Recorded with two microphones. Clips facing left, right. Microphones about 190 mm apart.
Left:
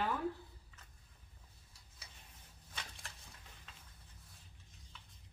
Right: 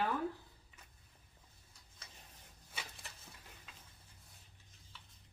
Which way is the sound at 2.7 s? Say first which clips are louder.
Right 1 dB; 5° right (ahead or behind).